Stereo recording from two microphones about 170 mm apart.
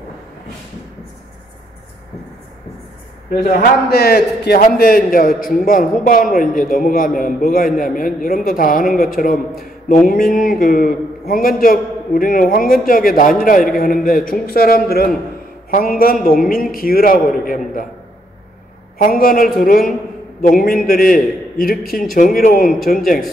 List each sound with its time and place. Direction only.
3.4 s a man's voice: 65° left (ahead or behind)
16.3 s a man's voice: 60° left (ahead or behind)
19.0 s a man's voice: 55° left (ahead or behind)